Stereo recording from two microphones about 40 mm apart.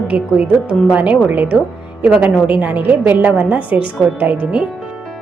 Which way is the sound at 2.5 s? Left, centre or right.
Right.